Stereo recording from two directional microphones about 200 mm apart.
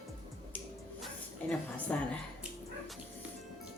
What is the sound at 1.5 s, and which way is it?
Speech, 5° left (ahead or behind).